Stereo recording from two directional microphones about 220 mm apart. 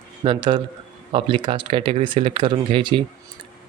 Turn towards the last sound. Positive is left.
turn(degrees=-20)  # may be behind; listen again after turning